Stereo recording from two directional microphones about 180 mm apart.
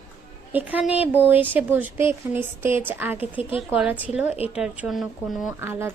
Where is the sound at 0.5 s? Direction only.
10° right (ahead or behind).